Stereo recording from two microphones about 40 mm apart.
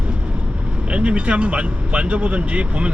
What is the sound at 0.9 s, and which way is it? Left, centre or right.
Speech, right.